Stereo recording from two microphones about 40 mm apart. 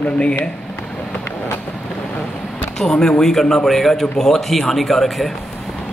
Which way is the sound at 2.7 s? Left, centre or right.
Centre.